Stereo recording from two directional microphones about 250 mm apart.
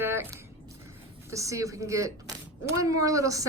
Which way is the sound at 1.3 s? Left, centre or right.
Centre.